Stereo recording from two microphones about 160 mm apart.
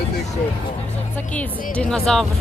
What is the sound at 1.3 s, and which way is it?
Speech, 5° left (ahead or behind).